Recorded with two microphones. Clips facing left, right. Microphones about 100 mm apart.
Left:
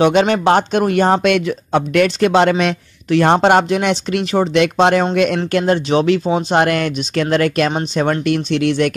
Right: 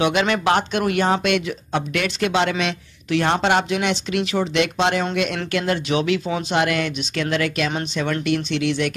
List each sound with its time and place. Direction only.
0.0 s speech: 35° left (ahead or behind)
6.5 s speech: 45° left (ahead or behind)